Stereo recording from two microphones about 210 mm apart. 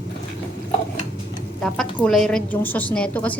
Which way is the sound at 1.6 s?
5° left (ahead or behind).